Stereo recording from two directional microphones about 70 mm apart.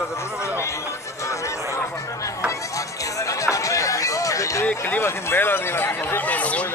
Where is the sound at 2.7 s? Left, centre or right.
Left.